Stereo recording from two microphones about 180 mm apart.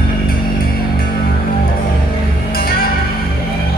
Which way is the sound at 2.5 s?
55° left (ahead or behind).